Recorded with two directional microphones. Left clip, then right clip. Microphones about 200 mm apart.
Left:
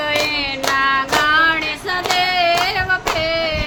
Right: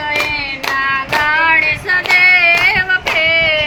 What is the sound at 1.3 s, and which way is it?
Music, 25° left (ahead or behind).